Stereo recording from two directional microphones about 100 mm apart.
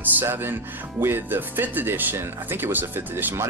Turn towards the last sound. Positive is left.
turn(degrees=-20)  # may be behind; listen again after turning